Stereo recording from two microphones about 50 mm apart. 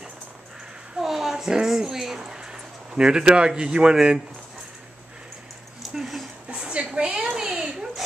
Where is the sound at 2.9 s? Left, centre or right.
Centre.